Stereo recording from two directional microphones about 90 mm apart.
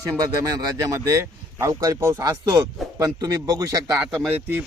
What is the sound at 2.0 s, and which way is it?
Speech, 25° right (ahead or behind).